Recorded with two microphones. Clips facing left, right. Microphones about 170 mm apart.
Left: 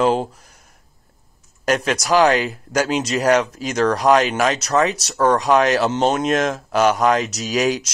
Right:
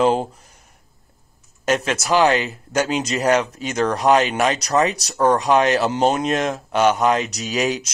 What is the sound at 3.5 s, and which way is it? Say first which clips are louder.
Speech: left 2 dB; 30° right (ahead or behind).